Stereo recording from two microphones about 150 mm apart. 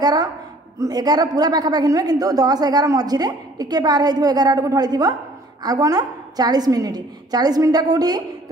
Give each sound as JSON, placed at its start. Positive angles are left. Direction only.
{"t": 0.0, "sound": "a woman's voice", "side_deg": -25}